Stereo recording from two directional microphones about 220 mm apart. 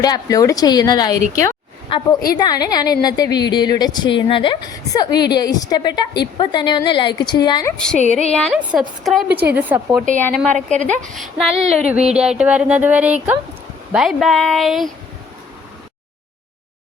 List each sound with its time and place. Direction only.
0.0 s a woman's voice: 15° left (ahead or behind)
8.3 s a woman's voice: centre (ahead or behind)
10.4 s a woman's voice: 5° left (ahead or behind)
10.8 s a woman's voice: 35° right (ahead or behind)
11.1 s a woman's voice: centre (ahead or behind)
11.5 s a sound: 30° right (ahead or behind)
11.9 s a woman's voice: 5° right (ahead or behind)